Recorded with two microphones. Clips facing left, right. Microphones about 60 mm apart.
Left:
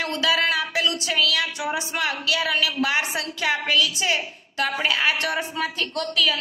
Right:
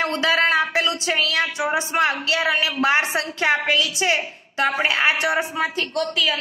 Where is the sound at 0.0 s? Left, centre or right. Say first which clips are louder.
Right 3 dB; right.